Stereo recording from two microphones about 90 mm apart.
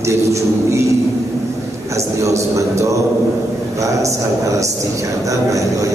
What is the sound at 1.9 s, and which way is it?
A man's voice, 35° right (ahead or behind).